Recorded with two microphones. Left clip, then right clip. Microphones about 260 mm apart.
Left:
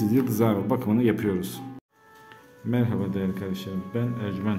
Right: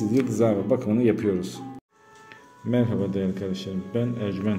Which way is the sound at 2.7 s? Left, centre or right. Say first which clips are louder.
Right 3 dB; centre.